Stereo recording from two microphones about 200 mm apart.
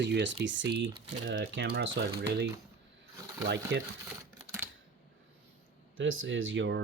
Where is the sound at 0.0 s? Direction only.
60° right (ahead or behind).